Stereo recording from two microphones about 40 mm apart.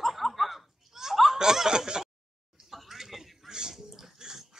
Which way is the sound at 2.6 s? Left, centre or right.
Centre.